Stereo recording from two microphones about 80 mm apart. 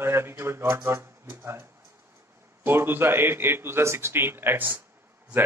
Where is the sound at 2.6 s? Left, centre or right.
Right.